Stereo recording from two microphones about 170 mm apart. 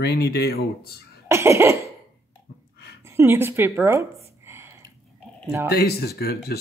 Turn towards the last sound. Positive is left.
turn(degrees=65)  # may be behind; listen again after turning